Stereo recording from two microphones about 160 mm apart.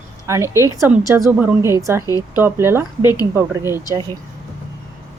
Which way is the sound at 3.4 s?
15° right (ahead or behind).